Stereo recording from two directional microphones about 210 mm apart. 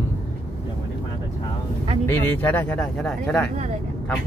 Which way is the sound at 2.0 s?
10° left (ahead or behind).